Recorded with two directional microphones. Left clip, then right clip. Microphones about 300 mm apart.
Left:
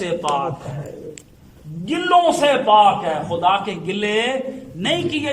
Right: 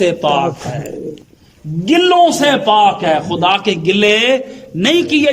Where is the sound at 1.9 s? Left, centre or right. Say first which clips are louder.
Right 6 dB; right.